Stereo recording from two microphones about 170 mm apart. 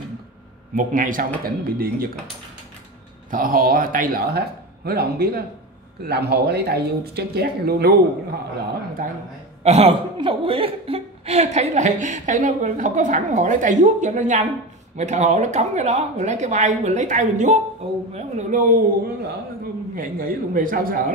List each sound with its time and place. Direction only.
0.7 s speech: 50° right (ahead or behind)
3.3 s speech: 55° right (ahead or behind)
9.0 s speech: 55° right (ahead or behind)
9.6 s a woman's voice: 40° right (ahead or behind)
20.0 s speech: 55° right (ahead or behind)